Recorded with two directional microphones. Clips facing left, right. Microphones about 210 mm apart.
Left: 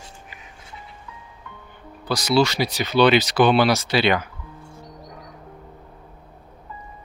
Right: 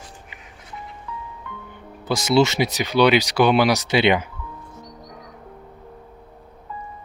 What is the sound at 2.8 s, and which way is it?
Speech, 10° right (ahead or behind).